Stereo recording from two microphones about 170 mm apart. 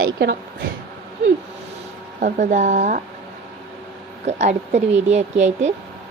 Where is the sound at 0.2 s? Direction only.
70° right (ahead or behind).